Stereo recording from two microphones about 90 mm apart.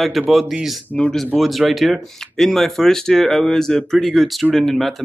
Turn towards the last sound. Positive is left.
turn(degrees=0)  # may be behind; listen again after turning